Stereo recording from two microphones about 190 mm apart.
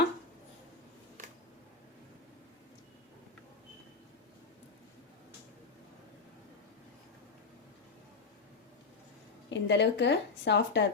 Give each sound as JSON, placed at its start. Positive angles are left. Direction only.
{"t": 9.5, "sound": "speech", "side_deg": 65}